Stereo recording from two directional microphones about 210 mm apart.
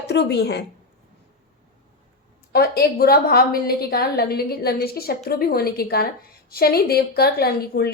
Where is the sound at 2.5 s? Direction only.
50° left (ahead or behind).